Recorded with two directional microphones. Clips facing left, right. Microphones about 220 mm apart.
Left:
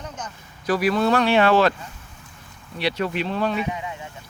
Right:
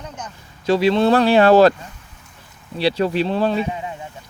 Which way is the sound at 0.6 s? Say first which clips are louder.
Right 5 dB; 25° right (ahead or behind).